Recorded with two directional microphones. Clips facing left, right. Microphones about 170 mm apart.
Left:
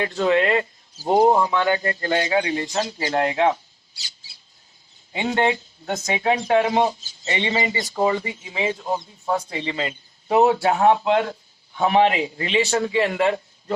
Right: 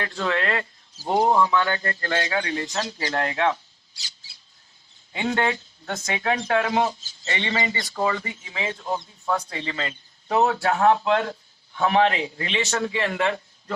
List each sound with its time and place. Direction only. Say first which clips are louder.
0.0 s speech: left 6 dB; 20° left (ahead or behind)
1.3 s speech: left 1 dB; 35° left (ahead or behind)
1.5 s speech: left 3 dB; 20° left (ahead or behind)
5.1 s speech: left 3 dB; 20° left (ahead or behind)